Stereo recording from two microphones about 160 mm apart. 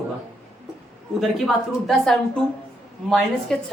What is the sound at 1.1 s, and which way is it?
Speech, centre (ahead or behind).